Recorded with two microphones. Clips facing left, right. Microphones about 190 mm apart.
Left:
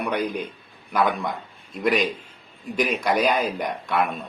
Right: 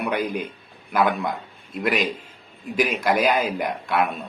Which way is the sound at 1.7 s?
5° right (ahead or behind).